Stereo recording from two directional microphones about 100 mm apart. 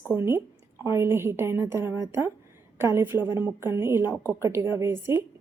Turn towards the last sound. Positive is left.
turn(degrees=-25)  # may be behind; listen again after turning